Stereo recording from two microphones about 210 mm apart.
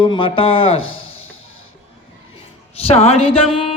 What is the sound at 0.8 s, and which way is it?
Speech, 80° left.